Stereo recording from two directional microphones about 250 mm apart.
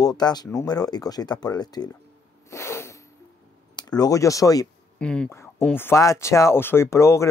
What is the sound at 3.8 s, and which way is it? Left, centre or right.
Speech, centre.